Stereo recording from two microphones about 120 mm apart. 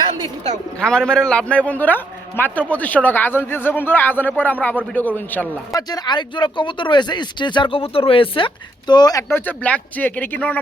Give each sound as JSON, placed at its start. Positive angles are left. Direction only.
{"t": 0.8, "sound": "a man's voice", "side_deg": 5}
{"t": 5.7, "sound": "speech", "side_deg": 35}
{"t": 9.3, "sound": "a man's voice", "side_deg": 15}